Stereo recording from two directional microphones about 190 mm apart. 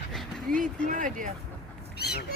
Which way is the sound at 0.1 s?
Centre (ahead or behind).